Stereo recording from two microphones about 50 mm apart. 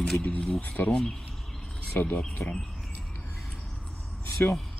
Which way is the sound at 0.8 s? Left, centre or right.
Centre.